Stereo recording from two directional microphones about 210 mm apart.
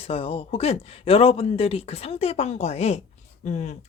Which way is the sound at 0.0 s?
25° left (ahead or behind).